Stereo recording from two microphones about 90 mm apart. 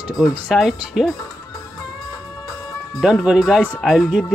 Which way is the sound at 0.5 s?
5° right (ahead or behind).